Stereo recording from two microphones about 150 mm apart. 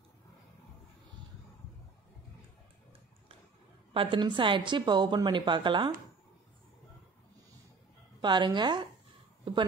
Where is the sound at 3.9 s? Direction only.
35° right (ahead or behind).